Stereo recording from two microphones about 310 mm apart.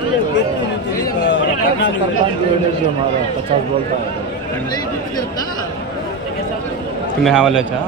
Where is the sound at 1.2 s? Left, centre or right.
Left.